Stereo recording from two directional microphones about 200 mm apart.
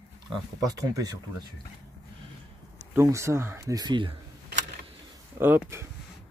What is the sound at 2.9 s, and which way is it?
Speech, 15° right (ahead or behind).